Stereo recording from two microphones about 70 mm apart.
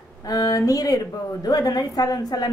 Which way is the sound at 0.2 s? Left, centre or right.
Left.